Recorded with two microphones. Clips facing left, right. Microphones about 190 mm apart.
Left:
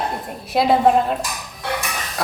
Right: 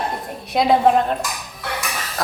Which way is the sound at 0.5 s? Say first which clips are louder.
Even; centre (ahead or behind).